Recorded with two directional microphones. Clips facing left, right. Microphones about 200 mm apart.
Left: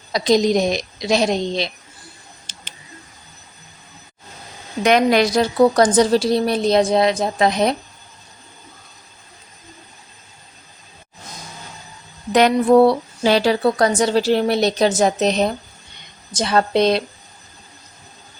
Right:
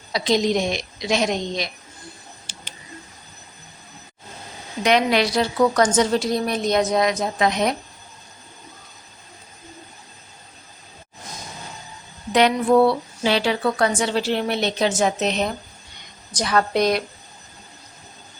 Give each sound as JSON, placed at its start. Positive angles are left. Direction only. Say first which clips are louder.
{"t": 0.1, "sound": "speech", "louder": "left 4 dB", "side_deg": 40}
{"t": 4.8, "sound": "speech", "louder": "left 4 dB", "side_deg": 45}
{"t": 12.3, "sound": "a woman's voice", "louder": "left 4 dB", "side_deg": 45}